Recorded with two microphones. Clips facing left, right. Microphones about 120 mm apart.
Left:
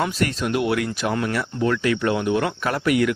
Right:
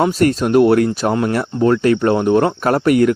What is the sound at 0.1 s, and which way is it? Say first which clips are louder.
Speech: right 9 dB; 40° right (ahead or behind).